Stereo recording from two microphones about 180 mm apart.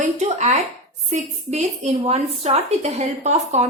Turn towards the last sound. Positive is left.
turn(degrees=-40)  # may be behind; listen again after turning